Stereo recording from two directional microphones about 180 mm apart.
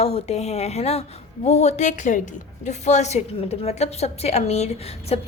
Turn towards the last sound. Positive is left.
turn(degrees=35)  # may be behind; listen again after turning